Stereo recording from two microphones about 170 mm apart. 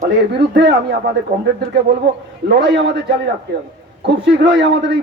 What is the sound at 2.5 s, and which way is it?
Speech, 75° right (ahead or behind).